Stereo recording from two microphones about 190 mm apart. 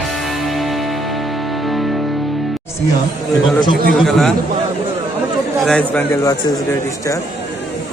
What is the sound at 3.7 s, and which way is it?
Speech, 50° right (ahead or behind).